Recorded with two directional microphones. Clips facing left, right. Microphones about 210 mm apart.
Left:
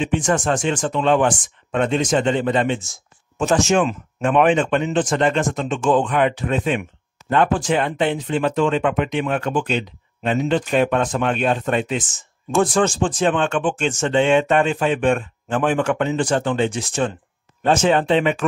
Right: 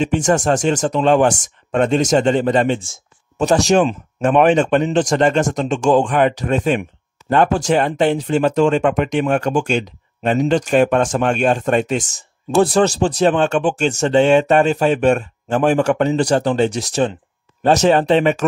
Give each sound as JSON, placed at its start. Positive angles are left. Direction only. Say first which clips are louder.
{"t": 0.0, "sound": "speech", "louder": "right 4 dB", "side_deg": -40}